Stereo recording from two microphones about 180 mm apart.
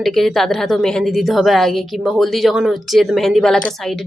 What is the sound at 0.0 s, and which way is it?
A woman's voice, centre (ahead or behind).